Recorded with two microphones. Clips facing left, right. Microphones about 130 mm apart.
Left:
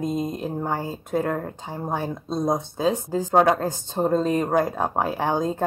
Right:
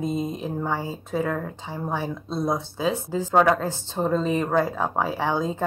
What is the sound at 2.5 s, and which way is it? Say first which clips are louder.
Speech: left 2 dB; 45° left (ahead or behind).